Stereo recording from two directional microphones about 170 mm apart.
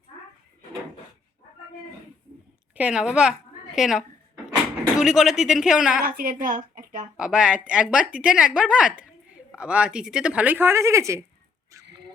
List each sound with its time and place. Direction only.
2.7 s speech: 5° right (ahead or behind)
6.1 s speech: 55° right (ahead or behind)
7.2 s speech: 5° right (ahead or behind)